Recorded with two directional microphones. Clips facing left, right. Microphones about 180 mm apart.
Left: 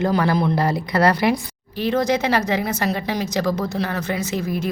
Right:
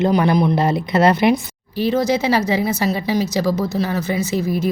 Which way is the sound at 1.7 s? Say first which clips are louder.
Right 2 dB; 10° right (ahead or behind).